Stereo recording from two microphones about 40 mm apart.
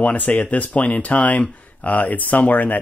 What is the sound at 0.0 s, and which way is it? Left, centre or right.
Speech, left.